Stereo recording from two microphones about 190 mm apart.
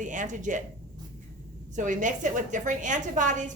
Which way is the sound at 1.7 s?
40° right (ahead or behind).